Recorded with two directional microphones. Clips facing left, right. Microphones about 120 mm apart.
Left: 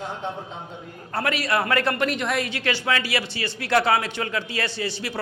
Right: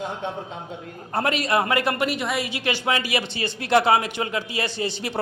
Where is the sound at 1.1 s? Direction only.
20° right (ahead or behind).